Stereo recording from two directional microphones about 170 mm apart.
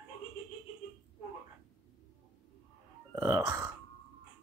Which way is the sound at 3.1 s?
15° right (ahead or behind).